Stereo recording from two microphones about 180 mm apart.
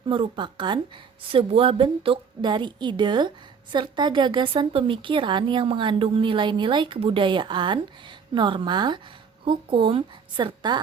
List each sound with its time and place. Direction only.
0.1 s a woman's voice: 25° right (ahead or behind)